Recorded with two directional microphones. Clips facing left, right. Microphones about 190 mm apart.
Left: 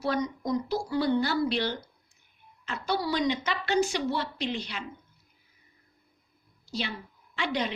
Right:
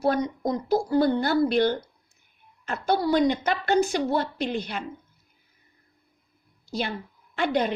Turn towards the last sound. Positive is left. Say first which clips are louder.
# right 6 dB
turn(degrees=-50)  # may be behind; listen again after turning